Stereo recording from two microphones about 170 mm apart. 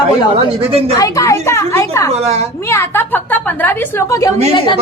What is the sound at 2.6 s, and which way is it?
A woman's voice, 15° left (ahead or behind).